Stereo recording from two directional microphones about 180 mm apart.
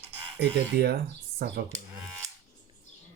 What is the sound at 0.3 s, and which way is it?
Speech, 65° right (ahead or behind).